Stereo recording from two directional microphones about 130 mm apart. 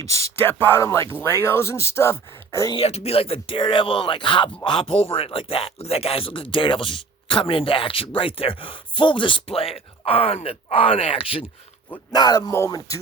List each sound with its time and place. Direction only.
0.4 s speech: 20° left (ahead or behind)
2.7 s speech: 55° left (ahead or behind)
12.1 s speech: 30° left (ahead or behind)